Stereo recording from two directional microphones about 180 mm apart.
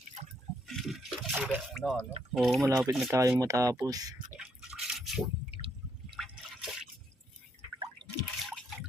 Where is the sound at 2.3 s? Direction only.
Centre (ahead or behind).